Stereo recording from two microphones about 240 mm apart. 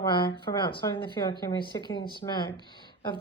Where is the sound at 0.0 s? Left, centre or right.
Centre.